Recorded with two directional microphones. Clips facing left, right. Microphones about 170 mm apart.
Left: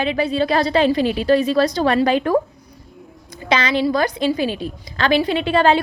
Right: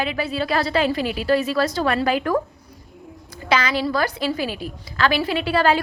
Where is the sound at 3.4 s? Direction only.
25° left (ahead or behind).